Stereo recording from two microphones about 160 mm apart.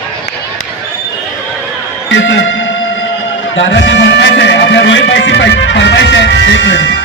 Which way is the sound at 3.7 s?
90° left.